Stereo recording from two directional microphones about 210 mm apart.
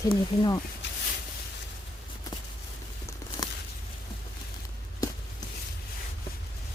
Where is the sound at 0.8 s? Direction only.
60° left (ahead or behind).